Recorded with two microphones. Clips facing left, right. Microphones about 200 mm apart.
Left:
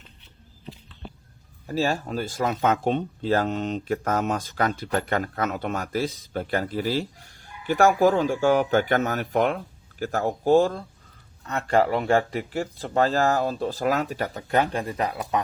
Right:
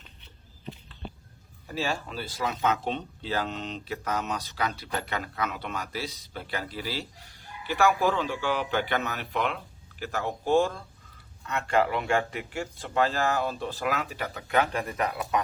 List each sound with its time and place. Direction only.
1.6 s speech: 40° left (ahead or behind)